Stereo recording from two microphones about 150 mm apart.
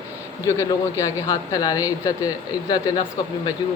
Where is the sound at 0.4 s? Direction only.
20° left (ahead or behind).